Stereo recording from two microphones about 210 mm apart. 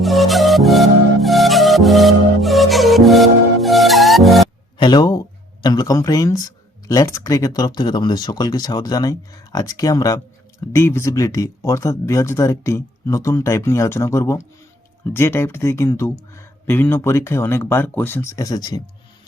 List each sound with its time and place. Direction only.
0.0 s music: centre (ahead or behind)
4.8 s a sound: 20° left (ahead or behind)
5.6 s speech: 15° left (ahead or behind)